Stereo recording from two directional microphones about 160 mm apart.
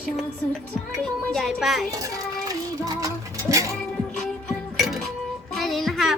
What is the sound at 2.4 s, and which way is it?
Music, 20° right (ahead or behind).